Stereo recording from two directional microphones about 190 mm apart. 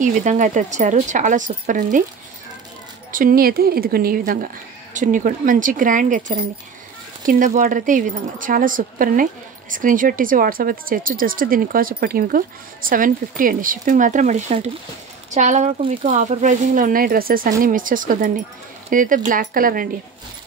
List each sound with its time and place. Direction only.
0.0 s speech: 40° right (ahead or behind)
3.1 s speech: 45° right (ahead or behind)